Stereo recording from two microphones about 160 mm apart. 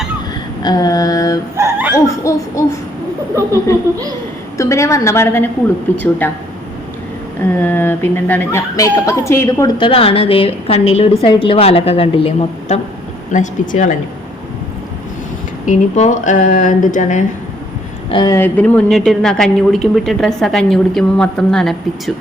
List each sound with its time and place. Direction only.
0.6 s mantra: 25° left (ahead or behind)
1.5 s dog: 15° right (ahead or behind)
2.3 s mantra: 20° left (ahead or behind)
4.5 s a woman's voice: 20° left (ahead or behind)
7.6 s speech: 15° left (ahead or behind); by 12.8 s 40° left (ahead or behind)
13.3 s speech: 50° left (ahead or behind)
15.6 s speech: 50° left (ahead or behind)
18.1 s mantra: 30° left (ahead or behind)
18.3 s a man's voice: 10° left (ahead or behind)